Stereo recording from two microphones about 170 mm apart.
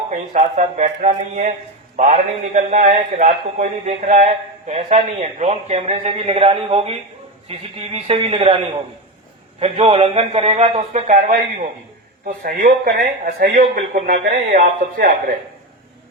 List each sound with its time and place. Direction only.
0.1 s a man's voice: 45° right (ahead or behind)
9.6 s a man's voice: 35° right (ahead or behind)